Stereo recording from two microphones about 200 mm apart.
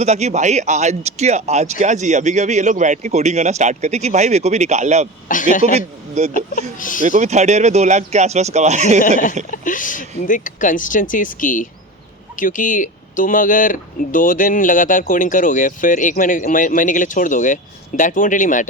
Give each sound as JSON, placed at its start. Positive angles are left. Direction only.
{"t": 0.0, "sound": "speech", "side_deg": -35}
{"t": 5.3, "sound": "speech", "side_deg": 40}
{"t": 5.7, "sound": "speech", "side_deg": -35}
{"t": 6.3, "sound": "speech", "side_deg": 40}
{"t": 7.0, "sound": "speech", "side_deg": -35}
{"t": 9.0, "sound": "speech", "side_deg": 40}